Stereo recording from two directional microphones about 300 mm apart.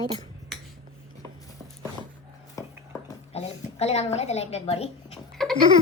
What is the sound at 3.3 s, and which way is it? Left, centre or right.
A woman's voice, left.